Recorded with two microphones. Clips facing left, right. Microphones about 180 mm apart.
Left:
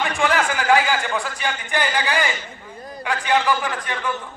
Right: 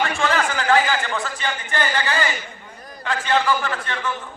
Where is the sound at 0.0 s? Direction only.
15° left (ahead or behind).